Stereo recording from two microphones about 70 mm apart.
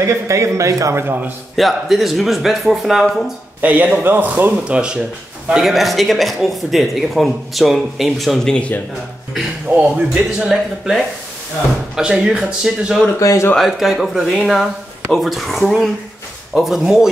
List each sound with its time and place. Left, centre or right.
0.3 s speech: right
0.9 s a man's voice: right
1.6 s speech: centre
3.6 s a man's voice: right
4.6 s speech: centre
5.5 s speech: centre
8.5 s speech: centre
9.8 s speech: centre
13.2 s speech: left
13.6 s speech: centre